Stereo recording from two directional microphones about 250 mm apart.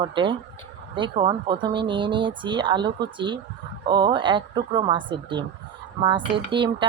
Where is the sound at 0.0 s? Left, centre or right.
Centre.